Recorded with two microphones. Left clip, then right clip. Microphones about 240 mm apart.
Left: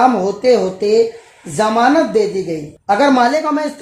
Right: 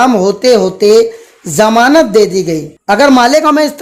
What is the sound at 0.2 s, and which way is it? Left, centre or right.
Speech, right.